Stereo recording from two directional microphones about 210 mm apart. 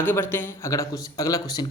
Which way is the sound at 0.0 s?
10° left (ahead or behind).